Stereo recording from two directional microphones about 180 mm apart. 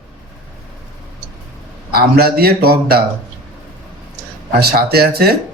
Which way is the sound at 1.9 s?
60° right (ahead or behind).